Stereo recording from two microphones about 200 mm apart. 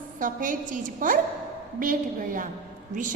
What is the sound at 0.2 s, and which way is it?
A woman's voice, 40° right (ahead or behind).